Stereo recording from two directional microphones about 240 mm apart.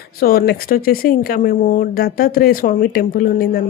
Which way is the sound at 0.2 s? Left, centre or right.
Left.